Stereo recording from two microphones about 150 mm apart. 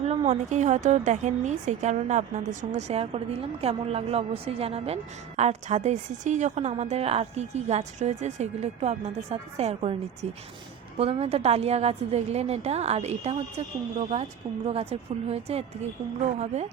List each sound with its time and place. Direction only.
0.5 s a woman's voice: 55° right (ahead or behind)